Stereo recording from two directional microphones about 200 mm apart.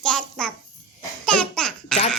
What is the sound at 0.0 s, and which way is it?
Babbling, 5° left (ahead or behind).